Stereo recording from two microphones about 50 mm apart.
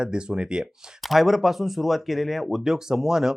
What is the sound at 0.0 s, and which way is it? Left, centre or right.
Speech, centre.